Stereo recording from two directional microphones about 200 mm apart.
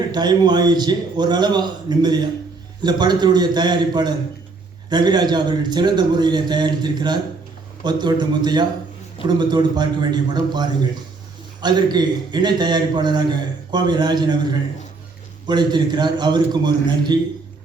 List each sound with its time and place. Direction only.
0.1 s a man's voice: 20° right (ahead or behind)